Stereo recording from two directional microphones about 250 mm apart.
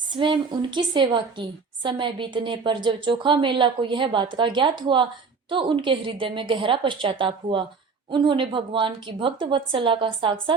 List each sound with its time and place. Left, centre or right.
0.1 s a woman's voice: centre